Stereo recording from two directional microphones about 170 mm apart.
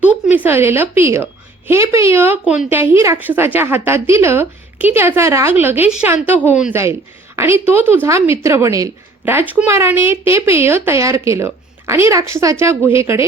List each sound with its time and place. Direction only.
0.3 s a woman's voice: 10° right (ahead or behind)